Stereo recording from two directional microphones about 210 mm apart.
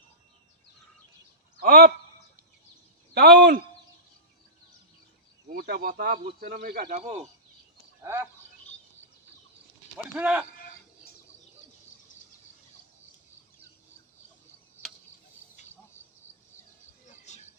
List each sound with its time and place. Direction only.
1.6 s speech: 45° right (ahead or behind)
3.2 s speech: 50° right (ahead or behind)
5.5 s speech: 50° right (ahead or behind)
6.8 s speech: 30° right (ahead or behind)
8.0 s speech: 15° right (ahead or behind)
10.0 s speech: 5° right (ahead or behind)
16.2 s a sound: 35° right (ahead or behind)
17.1 s cricket: 35° left (ahead or behind)